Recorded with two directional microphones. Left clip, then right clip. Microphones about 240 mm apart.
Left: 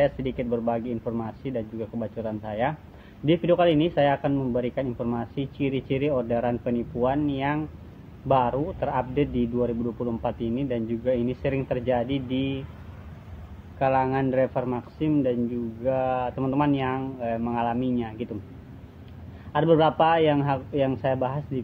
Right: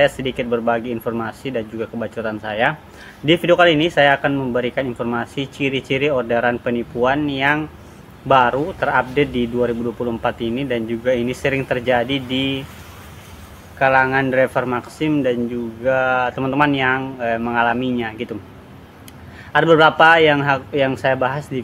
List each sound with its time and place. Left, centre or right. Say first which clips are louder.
0.0 s speech: right 7 dB; centre
13.7 s speech: right 8 dB; centre
19.5 s speech: right 8 dB; centre